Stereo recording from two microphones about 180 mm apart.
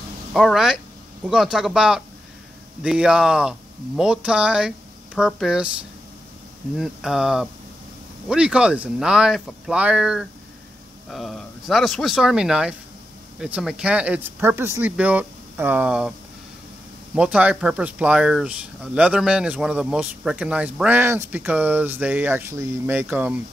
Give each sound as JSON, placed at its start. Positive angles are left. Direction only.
{"t": 0.3, "sound": "speech", "side_deg": 0}
{"t": 6.8, "sound": "speech", "side_deg": 0}
{"t": 17.1, "sound": "speech", "side_deg": -5}